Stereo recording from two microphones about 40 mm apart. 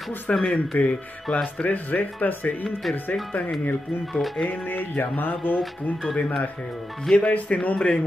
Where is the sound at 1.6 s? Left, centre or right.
Left.